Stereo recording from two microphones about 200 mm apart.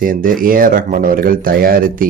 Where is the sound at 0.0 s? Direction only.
45° right (ahead or behind).